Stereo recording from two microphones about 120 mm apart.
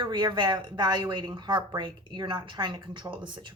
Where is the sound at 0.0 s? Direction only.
40° right (ahead or behind).